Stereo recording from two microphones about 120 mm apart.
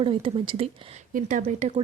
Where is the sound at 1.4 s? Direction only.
75° right (ahead or behind).